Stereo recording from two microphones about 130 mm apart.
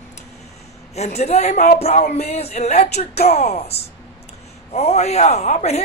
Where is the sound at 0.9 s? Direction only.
55° left (ahead or behind).